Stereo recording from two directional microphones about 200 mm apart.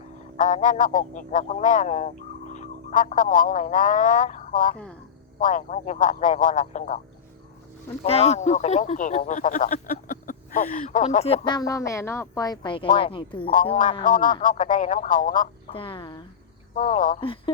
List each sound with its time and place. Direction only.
0.3 s speech: 40° left (ahead or behind)
8.0 s speech: 30° left (ahead or behind)
14.0 s speech: 40° left (ahead or behind)
15.7 s speech: 25° left (ahead or behind)
16.7 s speech: 40° left (ahead or behind)
17.2 s speech: 25° left (ahead or behind)